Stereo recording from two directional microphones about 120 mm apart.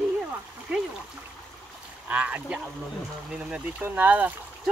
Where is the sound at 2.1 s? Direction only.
10° right (ahead or behind).